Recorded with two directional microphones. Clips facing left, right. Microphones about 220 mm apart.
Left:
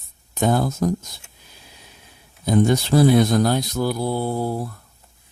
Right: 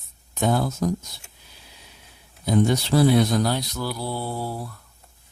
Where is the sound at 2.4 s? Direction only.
50° left (ahead or behind).